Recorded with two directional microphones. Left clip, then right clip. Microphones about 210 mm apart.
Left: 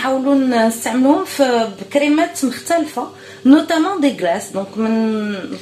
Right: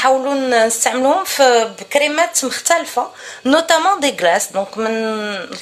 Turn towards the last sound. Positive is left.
turn(degrees=-45)  # may be behind; listen again after turning